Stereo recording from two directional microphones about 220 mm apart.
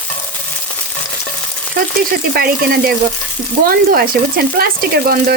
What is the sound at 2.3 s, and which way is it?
Speech, 45° right (ahead or behind).